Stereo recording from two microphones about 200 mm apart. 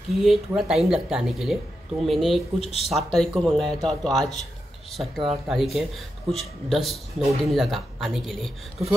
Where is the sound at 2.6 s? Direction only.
30° left (ahead or behind).